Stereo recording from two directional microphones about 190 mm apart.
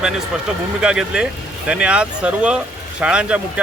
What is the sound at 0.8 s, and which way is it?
Speech, 5° right (ahead or behind).